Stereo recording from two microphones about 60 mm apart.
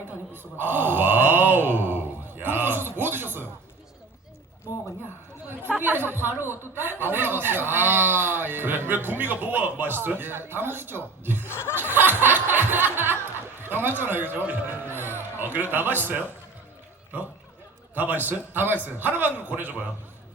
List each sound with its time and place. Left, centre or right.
0.6 s a sound: right
5.6 s a sound: right
11.4 s chuckle: left
11.8 s music: right
13.6 s a man's voice: right
17.9 s a man's voice: right